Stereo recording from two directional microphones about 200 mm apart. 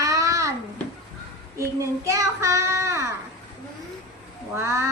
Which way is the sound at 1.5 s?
15° right (ahead or behind).